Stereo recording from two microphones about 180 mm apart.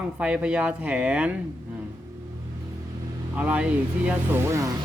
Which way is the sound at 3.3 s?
10° right (ahead or behind).